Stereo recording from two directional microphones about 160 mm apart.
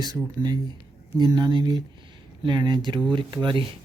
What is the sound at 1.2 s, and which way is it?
Speech, 25° right (ahead or behind).